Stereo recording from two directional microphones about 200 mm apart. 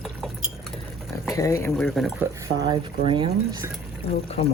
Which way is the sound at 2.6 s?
20° right (ahead or behind).